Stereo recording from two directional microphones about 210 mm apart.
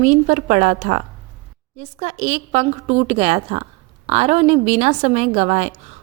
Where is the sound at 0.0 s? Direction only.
35° right (ahead or behind).